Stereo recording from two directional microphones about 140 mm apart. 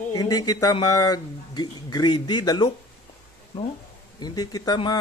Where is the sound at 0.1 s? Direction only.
25° left (ahead or behind).